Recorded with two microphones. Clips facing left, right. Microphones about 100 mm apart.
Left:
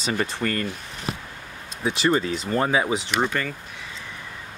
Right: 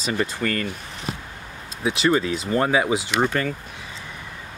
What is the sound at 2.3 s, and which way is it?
Speech, 5° right (ahead or behind).